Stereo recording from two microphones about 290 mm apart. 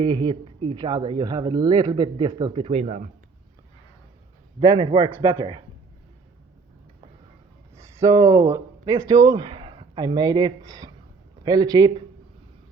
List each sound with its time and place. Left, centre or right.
0.0 s speech: centre
4.6 s speech: centre
7.9 s a man's voice: centre